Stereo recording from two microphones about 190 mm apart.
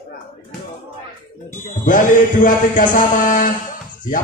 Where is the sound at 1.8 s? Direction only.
45° left (ahead or behind).